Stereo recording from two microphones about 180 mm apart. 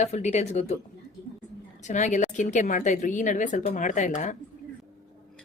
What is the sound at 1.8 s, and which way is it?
A woman's voice, 40° left (ahead or behind).